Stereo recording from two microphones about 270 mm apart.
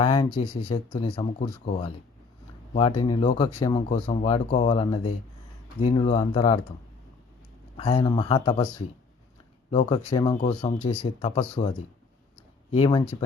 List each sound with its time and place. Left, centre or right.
0.0 s speech: centre
3.0 s speech: centre
7.8 s speech: centre
12.7 s speech: centre